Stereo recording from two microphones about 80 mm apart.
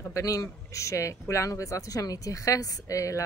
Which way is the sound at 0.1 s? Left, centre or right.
Left.